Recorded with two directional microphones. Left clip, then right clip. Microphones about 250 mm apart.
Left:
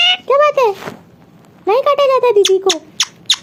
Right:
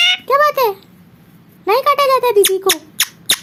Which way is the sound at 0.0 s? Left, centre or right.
Centre.